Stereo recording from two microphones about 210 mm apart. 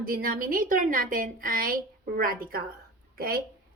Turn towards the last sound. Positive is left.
turn(degrees=-45)  # may be behind; listen again after turning